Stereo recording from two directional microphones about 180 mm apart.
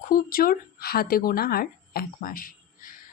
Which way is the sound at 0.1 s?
55° left (ahead or behind).